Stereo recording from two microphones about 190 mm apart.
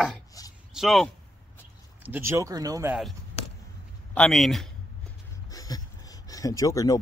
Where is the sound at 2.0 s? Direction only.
10° right (ahead or behind).